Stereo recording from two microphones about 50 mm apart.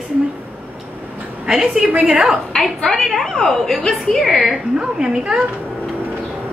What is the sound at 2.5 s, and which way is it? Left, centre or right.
A woman's voice, centre.